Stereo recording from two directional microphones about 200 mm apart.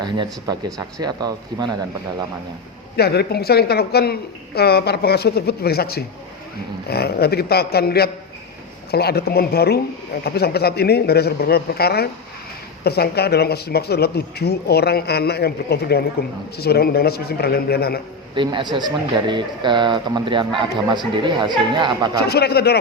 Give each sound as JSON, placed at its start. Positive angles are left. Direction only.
{"t": 0.0, "sound": "a man's voice", "side_deg": -20}
{"t": 2.9, "sound": "speech", "side_deg": 55}
{"t": 18.3, "sound": "a man's voice", "side_deg": -25}
{"t": 22.3, "sound": "speech", "side_deg": 55}